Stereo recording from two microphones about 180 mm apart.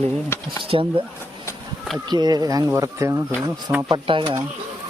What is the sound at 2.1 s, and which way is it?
Speech, 20° right (ahead or behind).